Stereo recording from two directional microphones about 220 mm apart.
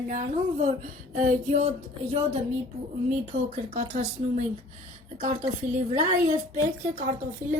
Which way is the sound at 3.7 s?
30° right (ahead or behind).